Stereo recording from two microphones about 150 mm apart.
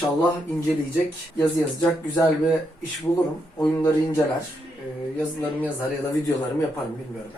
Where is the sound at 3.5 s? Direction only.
20° left (ahead or behind).